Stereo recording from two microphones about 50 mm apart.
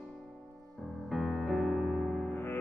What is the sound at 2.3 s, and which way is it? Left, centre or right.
Music, left.